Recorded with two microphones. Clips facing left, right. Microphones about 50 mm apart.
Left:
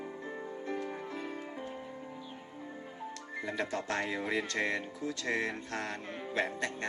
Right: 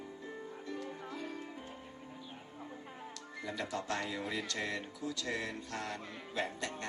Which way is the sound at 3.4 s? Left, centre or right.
Left.